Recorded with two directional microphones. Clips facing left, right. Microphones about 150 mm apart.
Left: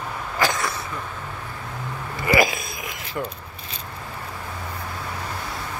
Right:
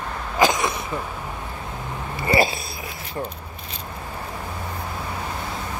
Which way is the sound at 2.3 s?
30° right (ahead or behind).